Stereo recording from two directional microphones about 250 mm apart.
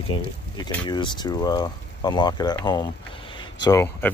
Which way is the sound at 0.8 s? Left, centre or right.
Centre.